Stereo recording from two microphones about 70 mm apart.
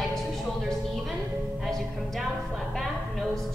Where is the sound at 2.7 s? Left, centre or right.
Centre.